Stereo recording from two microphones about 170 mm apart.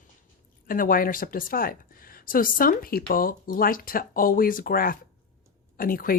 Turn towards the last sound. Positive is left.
turn(degrees=55)  # may be behind; listen again after turning